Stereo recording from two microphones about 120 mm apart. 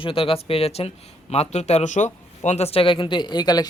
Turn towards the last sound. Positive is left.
turn(degrees=35)  # may be behind; listen again after turning